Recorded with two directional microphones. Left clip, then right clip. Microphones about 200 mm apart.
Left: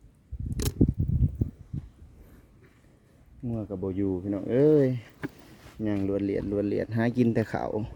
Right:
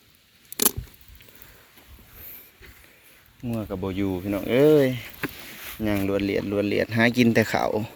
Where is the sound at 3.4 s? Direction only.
15° left (ahead or behind).